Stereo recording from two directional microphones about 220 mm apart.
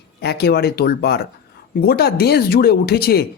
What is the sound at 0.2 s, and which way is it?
Speech, 45° left (ahead or behind).